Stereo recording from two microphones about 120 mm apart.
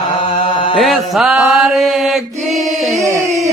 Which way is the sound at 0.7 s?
Centre (ahead or behind).